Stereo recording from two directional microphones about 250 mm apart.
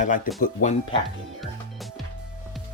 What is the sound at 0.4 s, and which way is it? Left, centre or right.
Speech, left.